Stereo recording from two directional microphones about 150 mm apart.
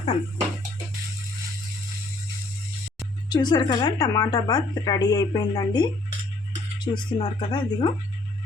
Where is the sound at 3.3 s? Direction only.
30° left (ahead or behind).